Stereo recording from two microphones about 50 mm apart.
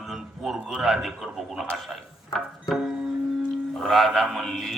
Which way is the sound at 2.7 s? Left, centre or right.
Centre.